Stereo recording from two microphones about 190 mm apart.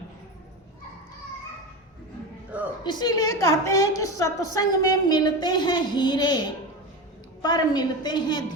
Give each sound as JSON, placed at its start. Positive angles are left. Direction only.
{"t": 2.8, "sound": "a woman's voice", "side_deg": 20}